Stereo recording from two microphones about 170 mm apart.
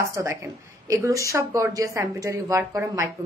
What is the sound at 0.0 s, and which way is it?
A woman's voice, 15° right (ahead or behind).